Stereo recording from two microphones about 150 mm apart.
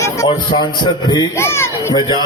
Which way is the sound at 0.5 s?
30° left (ahead or behind).